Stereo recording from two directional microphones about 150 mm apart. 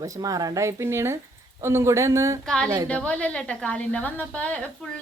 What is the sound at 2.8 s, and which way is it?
A woman's voice, 5° left (ahead or behind).